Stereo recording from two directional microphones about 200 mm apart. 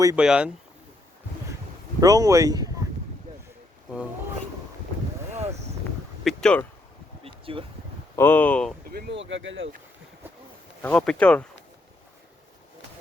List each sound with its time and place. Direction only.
0.2 s speech: 5° right (ahead or behind)
2.0 s speech: 15° right (ahead or behind)
5.3 s a sound: 35° right (ahead or behind)
6.2 s speech: 5° left (ahead or behind)
7.3 s a sound: 25° right (ahead or behind)
8.1 s speech: 10° left (ahead or behind)
8.9 s speech: 55° right (ahead or behind)
10.8 s speech: 5° left (ahead or behind)